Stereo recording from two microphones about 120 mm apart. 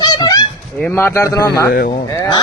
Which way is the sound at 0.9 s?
20° left (ahead or behind).